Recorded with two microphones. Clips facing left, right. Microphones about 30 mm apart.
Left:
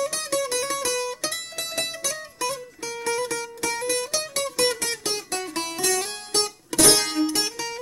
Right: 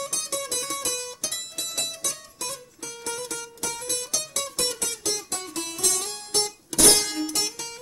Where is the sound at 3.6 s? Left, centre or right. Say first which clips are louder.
Left 6 dB; left.